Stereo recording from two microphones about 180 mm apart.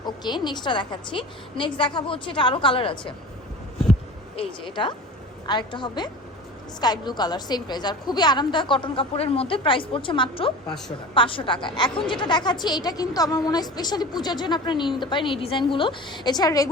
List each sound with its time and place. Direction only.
0.0 s a woman's voice: 25° left (ahead or behind)
4.4 s a woman's voice: 25° left (ahead or behind)